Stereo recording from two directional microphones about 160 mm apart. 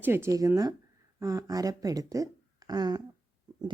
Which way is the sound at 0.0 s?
15° right (ahead or behind).